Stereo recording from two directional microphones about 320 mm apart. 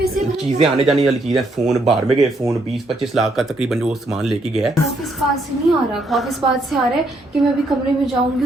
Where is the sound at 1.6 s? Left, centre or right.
Centre.